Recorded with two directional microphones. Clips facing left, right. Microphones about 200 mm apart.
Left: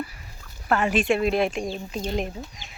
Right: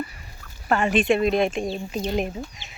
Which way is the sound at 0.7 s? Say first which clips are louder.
Right 2 dB; centre (ahead or behind).